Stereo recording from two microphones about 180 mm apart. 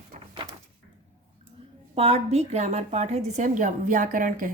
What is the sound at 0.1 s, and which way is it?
Door, 40° right (ahead or behind).